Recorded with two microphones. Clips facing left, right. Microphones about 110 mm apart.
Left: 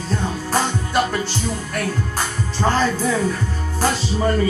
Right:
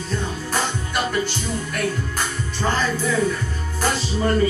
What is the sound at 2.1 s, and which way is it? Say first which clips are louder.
Music: left 3 dB; 35° left (ahead or behind).